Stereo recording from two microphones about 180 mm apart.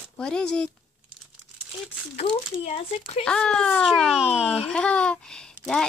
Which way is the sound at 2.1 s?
35° left (ahead or behind).